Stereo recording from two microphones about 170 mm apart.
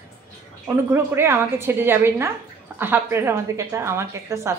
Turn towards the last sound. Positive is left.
turn(degrees=-15)  # may be behind; listen again after turning